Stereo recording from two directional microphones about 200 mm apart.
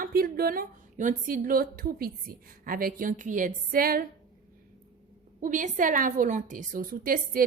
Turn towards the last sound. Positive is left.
turn(degrees=-45)  # may be behind; listen again after turning